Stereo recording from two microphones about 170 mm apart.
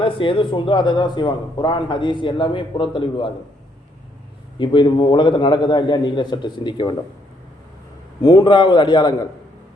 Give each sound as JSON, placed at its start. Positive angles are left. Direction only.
{"t": 0.0, "sound": "a man's voice", "side_deg": 30}
{"t": 4.5, "sound": "a man's voice", "side_deg": 30}
{"t": 8.2, "sound": "a man's voice", "side_deg": 25}